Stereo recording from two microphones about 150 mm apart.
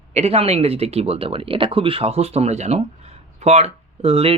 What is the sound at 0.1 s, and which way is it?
Speech, 45° right (ahead or behind).